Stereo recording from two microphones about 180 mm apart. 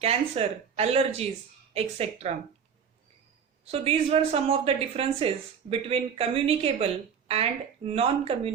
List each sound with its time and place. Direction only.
0.0 s speech: 35° right (ahead or behind)
3.6 s speech: 35° right (ahead or behind)